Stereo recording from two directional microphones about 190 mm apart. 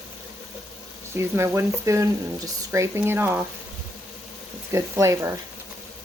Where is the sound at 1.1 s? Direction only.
15° right (ahead or behind).